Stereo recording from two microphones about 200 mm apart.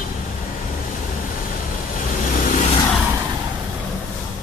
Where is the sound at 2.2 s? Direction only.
40° left (ahead or behind).